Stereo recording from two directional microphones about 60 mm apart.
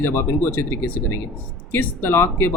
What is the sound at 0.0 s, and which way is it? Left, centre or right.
Speech, left.